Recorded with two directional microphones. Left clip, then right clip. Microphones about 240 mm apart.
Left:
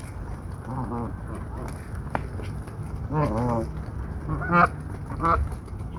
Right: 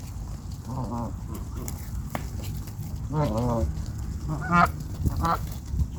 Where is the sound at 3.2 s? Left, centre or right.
Centre.